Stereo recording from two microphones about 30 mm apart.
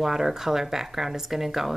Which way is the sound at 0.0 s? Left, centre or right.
Centre.